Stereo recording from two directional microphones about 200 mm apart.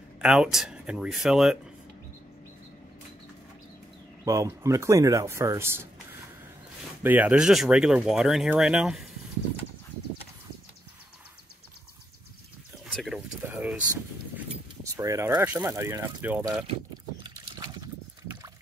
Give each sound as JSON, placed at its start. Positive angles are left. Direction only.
{"t": 0.2, "sound": "speech", "side_deg": -5}
{"t": 4.2, "sound": "speech", "side_deg": -15}
{"t": 7.0, "sound": "speech", "side_deg": -10}
{"t": 12.8, "sound": "speech", "side_deg": 0}
{"t": 17.2, "sound": "a sound", "side_deg": -20}